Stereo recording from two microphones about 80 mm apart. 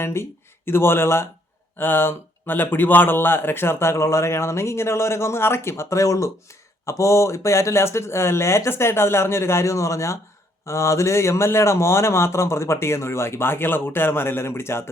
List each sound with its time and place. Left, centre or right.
0.0 s speech: left